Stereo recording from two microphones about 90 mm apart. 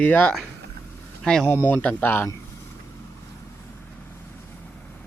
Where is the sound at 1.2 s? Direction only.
5° left (ahead or behind); by 2.3 s 25° left (ahead or behind).